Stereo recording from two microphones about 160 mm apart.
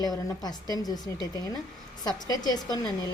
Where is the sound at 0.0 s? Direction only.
25° left (ahead or behind).